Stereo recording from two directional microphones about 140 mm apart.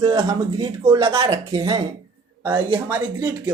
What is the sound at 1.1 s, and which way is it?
Speech, 40° right (ahead or behind).